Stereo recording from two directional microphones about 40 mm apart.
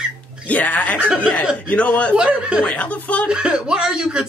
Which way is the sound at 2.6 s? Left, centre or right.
Left.